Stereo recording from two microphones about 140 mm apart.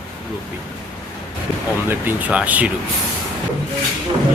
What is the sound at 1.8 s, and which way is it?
Speech, 10° right (ahead or behind).